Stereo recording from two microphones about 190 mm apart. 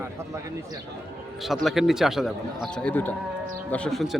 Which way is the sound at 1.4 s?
Centre (ahead or behind).